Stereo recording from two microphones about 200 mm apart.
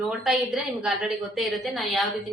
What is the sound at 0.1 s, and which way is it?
A woman's voice, centre (ahead or behind).